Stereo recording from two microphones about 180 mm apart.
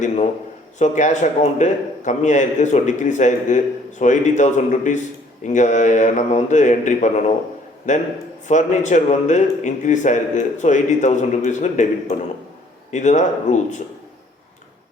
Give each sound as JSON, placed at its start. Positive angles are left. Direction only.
{"t": 0.8, "sound": "a man's voice", "side_deg": 40}